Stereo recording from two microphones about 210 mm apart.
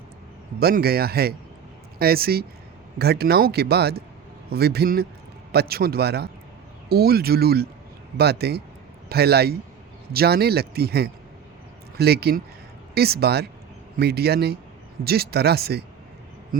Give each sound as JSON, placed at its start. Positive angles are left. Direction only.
{"t": 0.6, "sound": "speech", "side_deg": -45}